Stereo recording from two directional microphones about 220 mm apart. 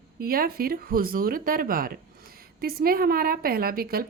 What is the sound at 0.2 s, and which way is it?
A woman's voice, 40° right (ahead or behind).